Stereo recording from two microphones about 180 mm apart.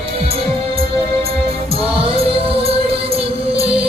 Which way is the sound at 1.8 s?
30° right (ahead or behind).